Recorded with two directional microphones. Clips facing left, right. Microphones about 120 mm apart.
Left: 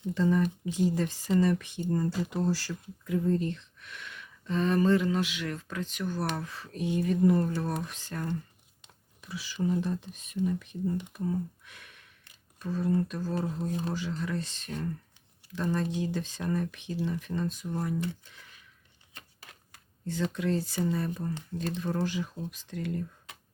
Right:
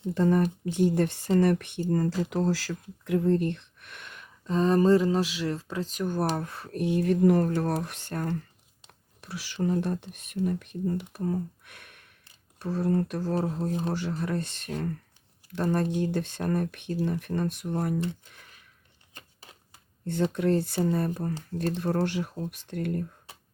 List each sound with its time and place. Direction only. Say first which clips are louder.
0.1 s speech: right 3 dB; 55° right (ahead or behind)
8.9 s speech: right 1 dB; 75° right (ahead or behind)
13.7 s speech: right 3 dB; 35° right (ahead or behind)
14.1 s speech: right 3 dB; 55° right (ahead or behind)
15.7 s speech: right 4 dB; 60° right (ahead or behind)
19.1 s a sound: right 1 dB; 25° right (ahead or behind)
20.3 s speech: right 6 dB; 55° right (ahead or behind)
21.3 s speech: right 4 dB; 35° right (ahead or behind)
21.8 s speech: right 3 dB; 65° right (ahead or behind)